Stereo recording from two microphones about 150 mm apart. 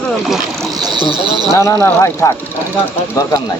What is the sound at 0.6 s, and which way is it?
Speech, 25° right (ahead or behind).